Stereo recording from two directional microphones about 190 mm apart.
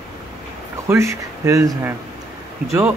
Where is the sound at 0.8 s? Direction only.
15° right (ahead or behind).